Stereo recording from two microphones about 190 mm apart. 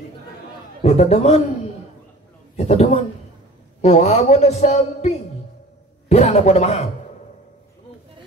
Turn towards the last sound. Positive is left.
turn(degrees=35)  # may be behind; listen again after turning